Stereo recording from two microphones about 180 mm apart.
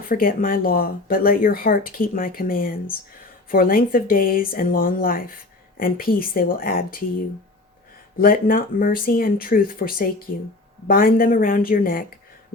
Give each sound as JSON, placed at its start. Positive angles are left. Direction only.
{"t": 0.1, "sound": "speech", "side_deg": 50}
{"t": 8.2, "sound": "speech", "side_deg": 50}